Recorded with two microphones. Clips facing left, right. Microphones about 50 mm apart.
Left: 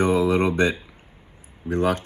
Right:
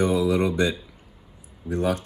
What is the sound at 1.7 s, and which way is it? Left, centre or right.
Speech, left.